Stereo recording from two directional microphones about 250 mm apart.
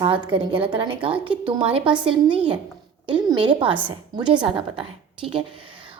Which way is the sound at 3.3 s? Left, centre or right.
Centre.